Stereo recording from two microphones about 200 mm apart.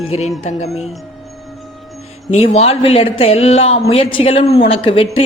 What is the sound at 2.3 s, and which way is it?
Speech, 30° left (ahead or behind).